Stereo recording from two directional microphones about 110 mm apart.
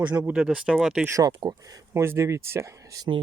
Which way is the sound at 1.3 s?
40° right (ahead or behind).